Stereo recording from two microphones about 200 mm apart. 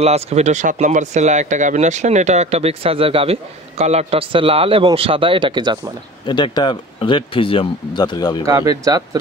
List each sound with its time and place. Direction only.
0.0 s speech: 30° right (ahead or behind)
6.2 s speech: 20° left (ahead or behind)
8.5 s speech: 20° right (ahead or behind)